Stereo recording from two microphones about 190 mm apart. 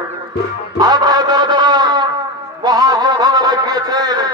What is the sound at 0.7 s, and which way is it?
Music, 20° right (ahead or behind).